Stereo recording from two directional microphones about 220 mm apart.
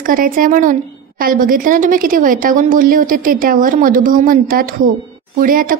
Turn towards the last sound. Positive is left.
turn(degrees=-40)  # may be behind; listen again after turning